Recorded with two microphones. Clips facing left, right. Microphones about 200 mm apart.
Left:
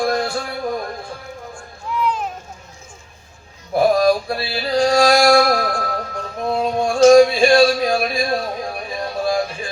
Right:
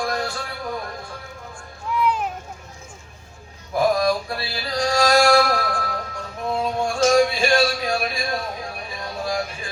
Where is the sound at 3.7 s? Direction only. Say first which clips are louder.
Left 5 dB; 35° left (ahead or behind).